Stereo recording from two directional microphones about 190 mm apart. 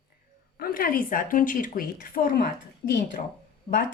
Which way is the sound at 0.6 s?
50° left (ahead or behind).